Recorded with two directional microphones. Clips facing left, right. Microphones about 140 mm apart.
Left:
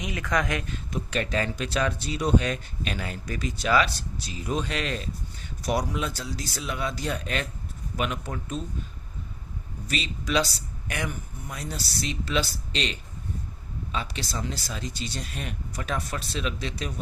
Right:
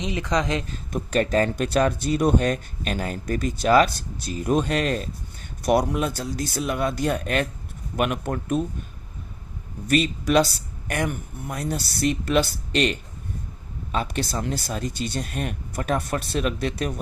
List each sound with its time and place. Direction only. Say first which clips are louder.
0.0 s a woman's voice: right 3 dB; 25° right (ahead or behind)
0.7 s speech: right 5 dB; 40° right (ahead or behind); by 8.6 s 60° right (ahead or behind)
9.8 s speech: right 10 dB; 55° right (ahead or behind)